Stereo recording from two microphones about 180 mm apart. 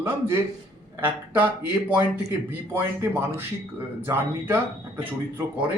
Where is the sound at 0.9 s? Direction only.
10° right (ahead or behind).